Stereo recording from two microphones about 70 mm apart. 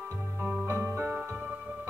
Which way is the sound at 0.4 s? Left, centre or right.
Right.